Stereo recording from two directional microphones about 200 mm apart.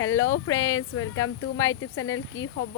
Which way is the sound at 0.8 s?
90° left.